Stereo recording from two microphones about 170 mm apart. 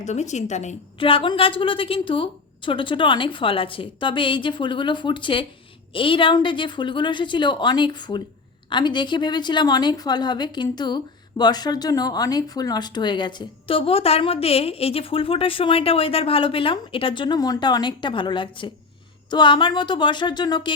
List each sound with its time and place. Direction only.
0.0 s a woman's voice: 40° left (ahead or behind); by 20.7 s 25° left (ahead or behind)